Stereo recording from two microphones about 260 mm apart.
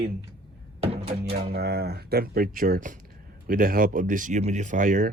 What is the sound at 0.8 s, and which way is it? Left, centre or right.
Music, right.